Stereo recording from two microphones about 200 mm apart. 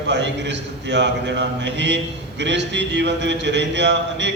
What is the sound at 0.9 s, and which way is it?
Mantra, 60° right (ahead or behind).